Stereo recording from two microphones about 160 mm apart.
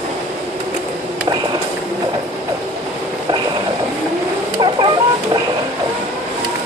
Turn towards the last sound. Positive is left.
turn(degrees=-30)  # may be behind; listen again after turning